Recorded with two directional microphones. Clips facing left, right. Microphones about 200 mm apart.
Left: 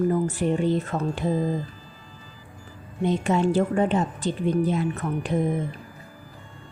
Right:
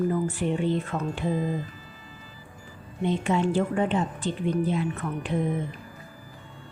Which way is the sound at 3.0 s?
40° left (ahead or behind).